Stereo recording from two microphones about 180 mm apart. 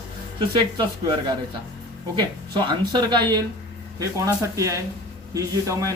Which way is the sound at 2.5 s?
25° right (ahead or behind).